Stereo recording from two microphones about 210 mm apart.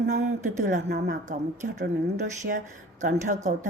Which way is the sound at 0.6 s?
50° right (ahead or behind).